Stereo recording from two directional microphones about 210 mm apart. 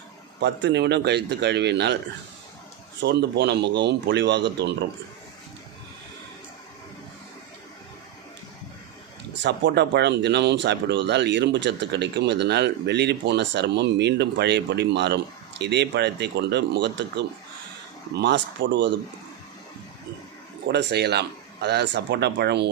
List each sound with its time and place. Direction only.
0.3 s speech: 55° right (ahead or behind)
3.0 s speech: 55° right (ahead or behind)
9.4 s speech: 55° right (ahead or behind)
20.7 s speech: 50° right (ahead or behind)